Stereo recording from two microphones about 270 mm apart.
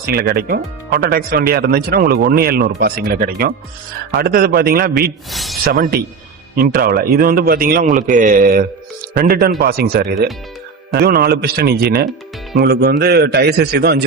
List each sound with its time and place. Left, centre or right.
0.0 s speech: right
5.3 s a sound: centre
5.6 s speech: right